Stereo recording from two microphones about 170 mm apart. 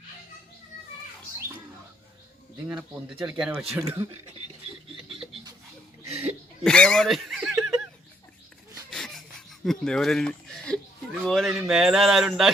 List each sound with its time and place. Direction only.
2.6 s a man's voice: 10° right (ahead or behind)
3.8 s a man's voice: 15° right (ahead or behind)
6.7 s speech: 5° left (ahead or behind)
8.9 s a sound: centre (ahead or behind)